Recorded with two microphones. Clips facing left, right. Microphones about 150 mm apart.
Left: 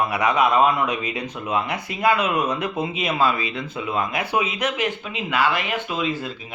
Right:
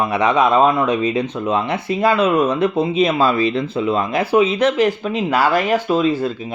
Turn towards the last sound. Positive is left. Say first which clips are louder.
# right 9 dB
turn(degrees=-35)  # may be behind; listen again after turning